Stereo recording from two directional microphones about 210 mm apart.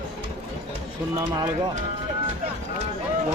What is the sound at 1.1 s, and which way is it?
Speech, 15° right (ahead or behind).